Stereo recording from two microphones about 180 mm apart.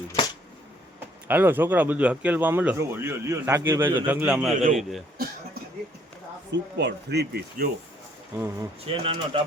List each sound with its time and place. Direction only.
0.9 s speech: 10° right (ahead or behind)
6.5 s speech: 70° right (ahead or behind)
8.4 s speech: 15° right (ahead or behind)
8.9 s speech: 30° right (ahead or behind)